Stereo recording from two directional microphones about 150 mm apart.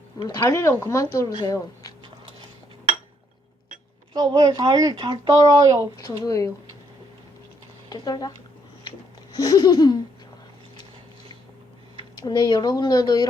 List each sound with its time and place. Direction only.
0.4 s speech: 15° left (ahead or behind)
4.1 s speech: 25° right (ahead or behind)
5.8 s speech: 20° left (ahead or behind)
7.9 s speech: 25° left (ahead or behind)
9.3 s speech: 25° left (ahead or behind)
12.2 s speech: 30° left (ahead or behind)